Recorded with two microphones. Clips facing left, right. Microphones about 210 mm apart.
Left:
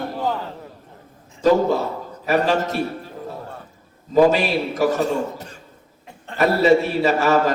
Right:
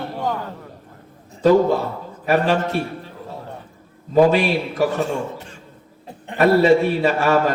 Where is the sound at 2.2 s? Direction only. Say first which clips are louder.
Right 1 dB; 40° left (ahead or behind).